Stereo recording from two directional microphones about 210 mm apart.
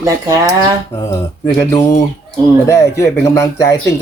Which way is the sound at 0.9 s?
15° left (ahead or behind).